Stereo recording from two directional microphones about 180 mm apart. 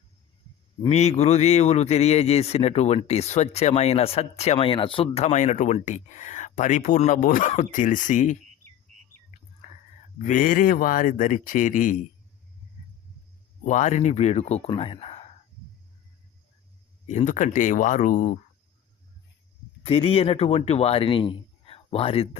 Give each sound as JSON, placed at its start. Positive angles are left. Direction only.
{"t": 0.9, "sound": "a man's voice", "side_deg": 35}
{"t": 10.2, "sound": "speech", "side_deg": 50}
{"t": 13.7, "sound": "a man's voice", "side_deg": 40}
{"t": 17.1, "sound": "speech", "side_deg": 45}
{"t": 19.8, "sound": "speech", "side_deg": 30}